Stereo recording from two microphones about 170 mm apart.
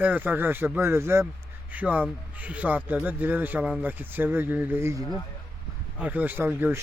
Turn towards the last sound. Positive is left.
turn(degrees=-10)  # may be behind; listen again after turning